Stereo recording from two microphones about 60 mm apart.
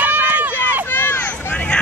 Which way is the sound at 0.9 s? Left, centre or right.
Left.